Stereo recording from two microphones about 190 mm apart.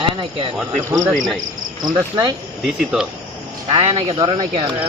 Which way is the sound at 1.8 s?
20° right (ahead or behind).